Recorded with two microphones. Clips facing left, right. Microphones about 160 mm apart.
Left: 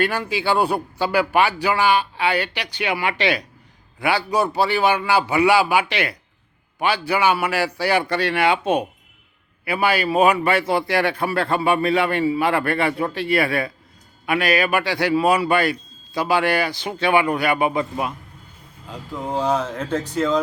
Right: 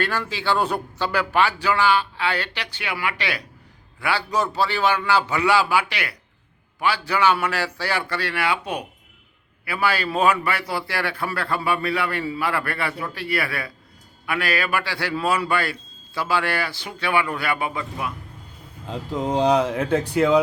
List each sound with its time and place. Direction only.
0.0 s a man's voice: 15° left (ahead or behind)
19.2 s speech: 20° right (ahead or behind)